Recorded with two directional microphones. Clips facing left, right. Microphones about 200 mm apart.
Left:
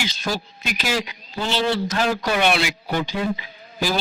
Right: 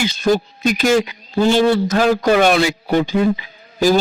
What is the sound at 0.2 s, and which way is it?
Speech, 50° right (ahead or behind).